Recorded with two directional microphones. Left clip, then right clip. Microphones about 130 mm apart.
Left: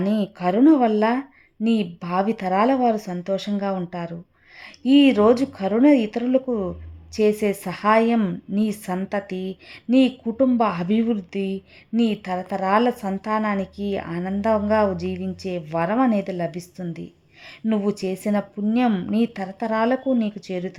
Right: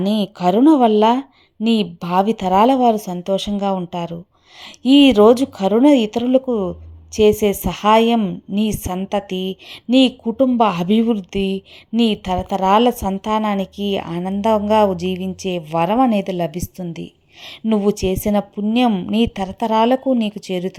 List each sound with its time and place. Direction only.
0.2 s a woman's voice: 25° right (ahead or behind)
4.9 s a woman's voice: 25° right (ahead or behind)